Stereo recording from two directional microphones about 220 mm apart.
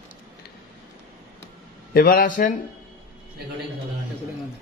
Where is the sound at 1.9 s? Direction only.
40° left (ahead or behind).